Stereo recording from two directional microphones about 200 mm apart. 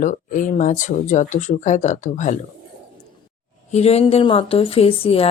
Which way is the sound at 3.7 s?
30° left (ahead or behind).